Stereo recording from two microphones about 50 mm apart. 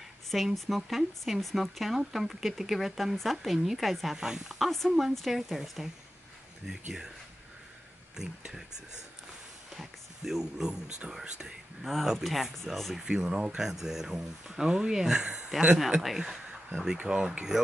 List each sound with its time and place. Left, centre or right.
0.3 s speech: centre
8.5 s speech: centre
11.8 s speech: centre
13.0 s speech: centre
16.9 s speech: centre